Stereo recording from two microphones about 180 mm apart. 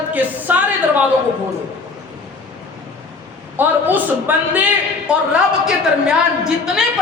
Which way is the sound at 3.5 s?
10° right (ahead or behind).